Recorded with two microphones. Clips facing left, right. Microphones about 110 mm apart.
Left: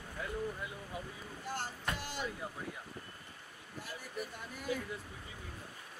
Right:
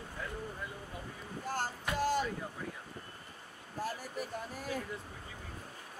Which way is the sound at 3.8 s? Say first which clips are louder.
Right 5 dB; 40° right (ahead or behind).